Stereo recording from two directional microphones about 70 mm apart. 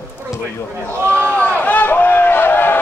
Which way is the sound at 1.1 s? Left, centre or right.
Left.